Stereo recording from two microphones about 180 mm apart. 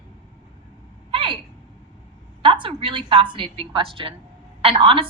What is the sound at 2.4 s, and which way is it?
A woman's voice, 30° right (ahead or behind).